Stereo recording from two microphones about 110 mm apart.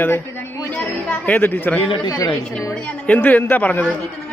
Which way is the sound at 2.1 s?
30° left (ahead or behind).